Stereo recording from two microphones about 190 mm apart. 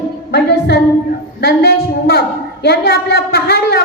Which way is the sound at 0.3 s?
65° left (ahead or behind).